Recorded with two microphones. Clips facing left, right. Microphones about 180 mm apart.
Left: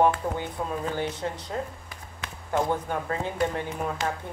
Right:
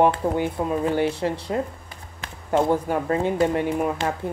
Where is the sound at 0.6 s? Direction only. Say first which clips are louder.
Right 6 dB; 20° right (ahead or behind).